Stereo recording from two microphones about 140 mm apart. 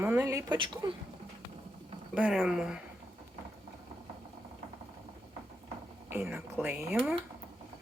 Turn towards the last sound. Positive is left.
turn(degrees=-10)  # may be behind; listen again after turning